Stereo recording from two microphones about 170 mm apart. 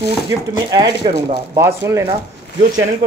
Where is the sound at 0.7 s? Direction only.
25° right (ahead or behind).